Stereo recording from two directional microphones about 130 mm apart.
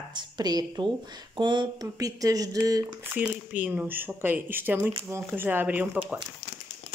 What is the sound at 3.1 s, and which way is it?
Speech, 10° right (ahead or behind).